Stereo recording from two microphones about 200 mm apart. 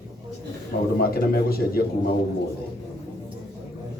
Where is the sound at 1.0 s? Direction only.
50° left (ahead or behind).